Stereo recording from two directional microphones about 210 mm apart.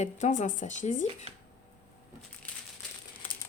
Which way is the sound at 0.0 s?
35° left (ahead or behind).